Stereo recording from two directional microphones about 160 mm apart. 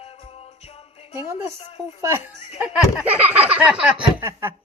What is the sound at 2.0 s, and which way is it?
Speech, 15° right (ahead or behind).